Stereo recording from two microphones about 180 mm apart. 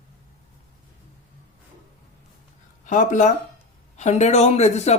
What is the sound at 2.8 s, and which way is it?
Speech, 45° left (ahead or behind).